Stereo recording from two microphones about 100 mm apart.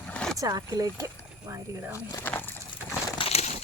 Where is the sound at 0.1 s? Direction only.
10° left (ahead or behind).